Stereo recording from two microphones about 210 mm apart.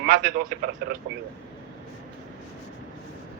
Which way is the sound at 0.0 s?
45° right (ahead or behind).